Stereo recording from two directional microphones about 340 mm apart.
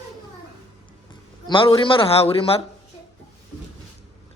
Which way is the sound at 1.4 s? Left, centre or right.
Centre.